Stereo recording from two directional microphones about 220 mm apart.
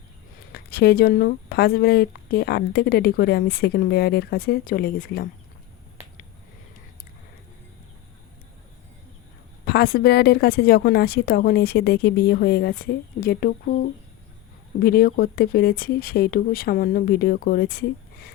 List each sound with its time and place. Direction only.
0.5 s speech: 45° left (ahead or behind)
9.6 s speech: 45° left (ahead or behind)
14.8 s speech: 45° left (ahead or behind)